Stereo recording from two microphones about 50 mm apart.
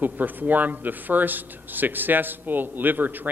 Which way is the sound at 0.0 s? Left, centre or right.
Right.